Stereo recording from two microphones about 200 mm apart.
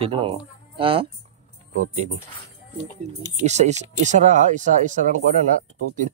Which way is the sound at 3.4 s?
35° right (ahead or behind).